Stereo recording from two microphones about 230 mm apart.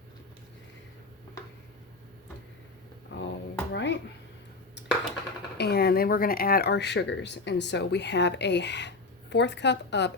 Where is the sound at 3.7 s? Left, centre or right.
Left.